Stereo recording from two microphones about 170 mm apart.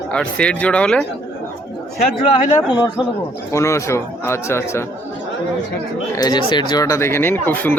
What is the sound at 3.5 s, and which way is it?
Speech, 15° left (ahead or behind).